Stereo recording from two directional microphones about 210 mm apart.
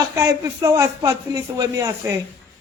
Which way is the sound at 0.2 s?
15° right (ahead or behind).